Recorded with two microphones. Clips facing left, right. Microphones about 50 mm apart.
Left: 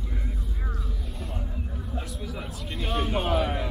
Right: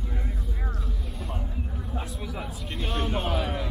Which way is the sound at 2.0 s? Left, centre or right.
Centre.